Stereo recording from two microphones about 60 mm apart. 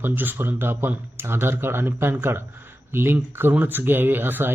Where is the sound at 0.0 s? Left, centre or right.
Right.